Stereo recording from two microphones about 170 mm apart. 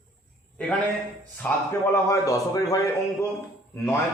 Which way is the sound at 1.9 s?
20° left (ahead or behind).